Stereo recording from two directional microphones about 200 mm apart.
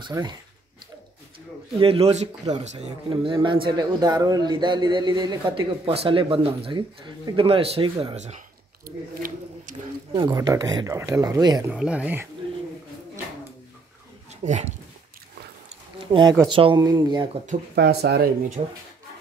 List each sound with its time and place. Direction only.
0.0 s a man's voice: 20° right (ahead or behind)
1.8 s a man's voice: 30° right (ahead or behind)
8.8 s speech: 45° right (ahead or behind)
10.1 s speech: 20° right (ahead or behind)
11.7 s speech: 5° right (ahead or behind)
14.4 s speech: 35° right (ahead or behind)
16.1 s a man's voice: 20° right (ahead or behind)
17.7 s speech: 55° right (ahead or behind)
18.6 s a man's voice: 35° right (ahead or behind)